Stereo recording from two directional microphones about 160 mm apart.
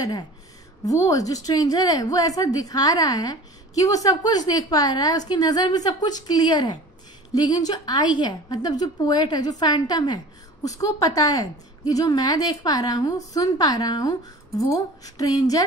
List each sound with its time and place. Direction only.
0.8 s a woman's voice: 20° left (ahead or behind)